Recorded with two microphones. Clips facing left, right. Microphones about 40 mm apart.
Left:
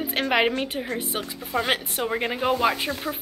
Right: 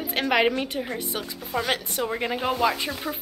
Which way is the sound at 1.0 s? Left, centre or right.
Left.